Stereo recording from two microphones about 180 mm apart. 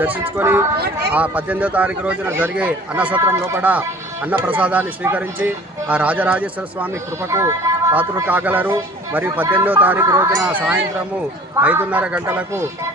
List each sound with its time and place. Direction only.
0.0 s speech: 10° right (ahead or behind)